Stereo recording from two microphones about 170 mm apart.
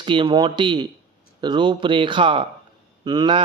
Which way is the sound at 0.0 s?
30° right (ahead or behind).